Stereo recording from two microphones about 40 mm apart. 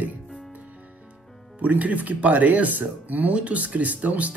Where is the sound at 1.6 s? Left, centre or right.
Right.